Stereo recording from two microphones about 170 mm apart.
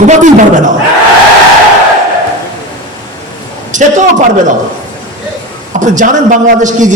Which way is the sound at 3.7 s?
45° right (ahead or behind).